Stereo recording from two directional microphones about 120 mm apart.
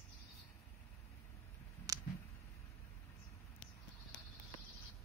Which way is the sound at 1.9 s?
30° right (ahead or behind).